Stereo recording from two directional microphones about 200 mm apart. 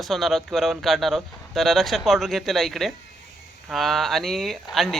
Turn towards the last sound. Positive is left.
turn(degrees=0)  # may be behind; listen again after turning